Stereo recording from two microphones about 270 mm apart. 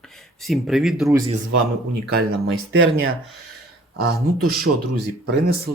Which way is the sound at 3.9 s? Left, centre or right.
Right.